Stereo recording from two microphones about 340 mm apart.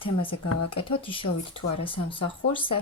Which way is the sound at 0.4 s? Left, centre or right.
Left.